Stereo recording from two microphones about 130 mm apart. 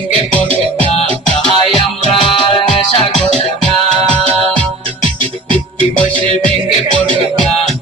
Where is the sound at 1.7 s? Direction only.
45° left (ahead or behind).